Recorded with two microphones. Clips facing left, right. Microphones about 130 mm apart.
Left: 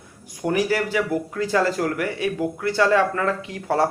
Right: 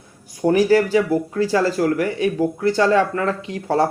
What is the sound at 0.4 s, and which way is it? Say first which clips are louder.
Speech: right 7 dB; 30° right (ahead or behind).